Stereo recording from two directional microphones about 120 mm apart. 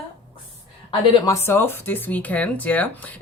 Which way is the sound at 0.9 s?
30° left (ahead or behind).